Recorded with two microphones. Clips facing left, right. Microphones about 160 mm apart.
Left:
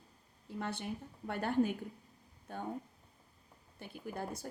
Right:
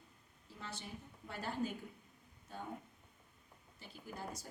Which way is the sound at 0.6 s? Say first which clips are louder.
Left 8 dB; 60° left (ahead or behind).